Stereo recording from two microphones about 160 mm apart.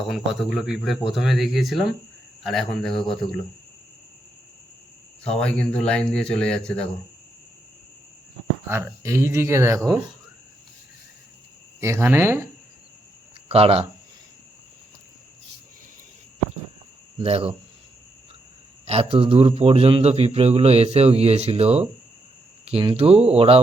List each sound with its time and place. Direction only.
0.0 s speech: centre (ahead or behind)
5.3 s speech: 5° left (ahead or behind)
8.7 s speech: 15° right (ahead or behind)
11.8 s speech: 15° right (ahead or behind)
13.5 s a man's voice: 40° right (ahead or behind)
17.2 s a man's voice: 40° right (ahead or behind)
18.9 s a man's voice: 40° right (ahead or behind)